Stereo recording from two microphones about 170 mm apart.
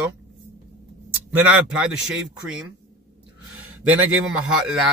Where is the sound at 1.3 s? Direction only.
10° right (ahead or behind).